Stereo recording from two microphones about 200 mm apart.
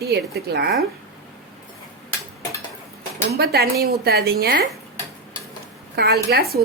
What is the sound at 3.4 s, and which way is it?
Speech, 50° right (ahead or behind).